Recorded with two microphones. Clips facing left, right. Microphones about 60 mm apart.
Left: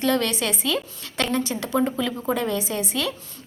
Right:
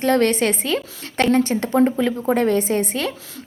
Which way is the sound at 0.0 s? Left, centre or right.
Right.